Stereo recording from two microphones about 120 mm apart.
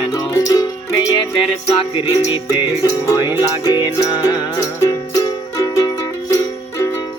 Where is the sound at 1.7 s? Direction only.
30° left (ahead or behind).